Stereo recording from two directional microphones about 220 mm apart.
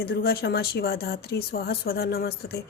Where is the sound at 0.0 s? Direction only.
45° left (ahead or behind).